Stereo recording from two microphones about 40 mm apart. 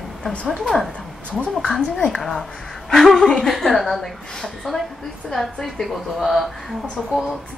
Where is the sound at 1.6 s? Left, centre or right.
Left.